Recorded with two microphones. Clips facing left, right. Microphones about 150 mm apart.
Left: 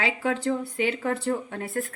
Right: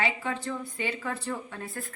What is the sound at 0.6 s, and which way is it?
Speech, 65° left (ahead or behind).